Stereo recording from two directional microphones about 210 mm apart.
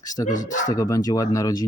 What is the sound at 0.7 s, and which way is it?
Speech, 15° left (ahead or behind).